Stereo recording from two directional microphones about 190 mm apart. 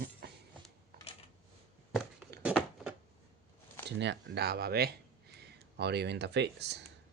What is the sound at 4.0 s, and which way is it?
Speech, 65° right (ahead or behind).